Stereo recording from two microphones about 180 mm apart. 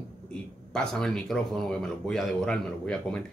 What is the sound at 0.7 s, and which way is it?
Speech, 5° left (ahead or behind).